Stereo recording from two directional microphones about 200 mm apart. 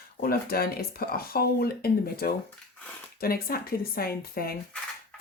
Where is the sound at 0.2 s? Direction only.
50° left (ahead or behind).